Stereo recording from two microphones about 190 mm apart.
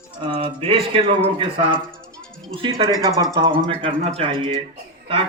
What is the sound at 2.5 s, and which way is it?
Speech, 30° right (ahead or behind).